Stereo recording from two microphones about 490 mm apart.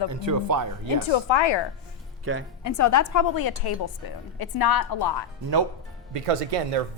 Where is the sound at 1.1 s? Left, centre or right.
Left.